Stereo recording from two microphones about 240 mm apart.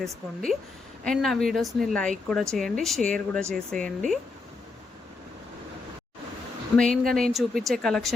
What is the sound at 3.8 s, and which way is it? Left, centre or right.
Speech, right.